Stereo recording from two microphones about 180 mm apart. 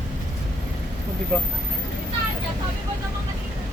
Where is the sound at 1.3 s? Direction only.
5° left (ahead or behind).